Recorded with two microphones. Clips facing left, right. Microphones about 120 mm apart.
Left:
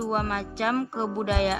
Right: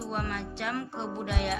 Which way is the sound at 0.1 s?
60° left (ahead or behind).